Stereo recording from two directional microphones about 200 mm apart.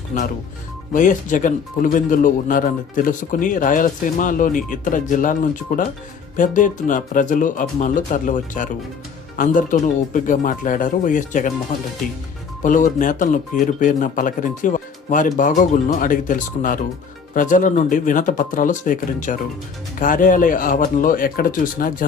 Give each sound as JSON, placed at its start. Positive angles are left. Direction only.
{"t": 0.1, "sound": "speech", "side_deg": 35}
{"t": 12.6, "sound": "speech", "side_deg": 40}